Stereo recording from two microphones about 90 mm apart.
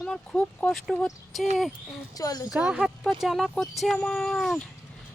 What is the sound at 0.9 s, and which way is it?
Speech, centre (ahead or behind).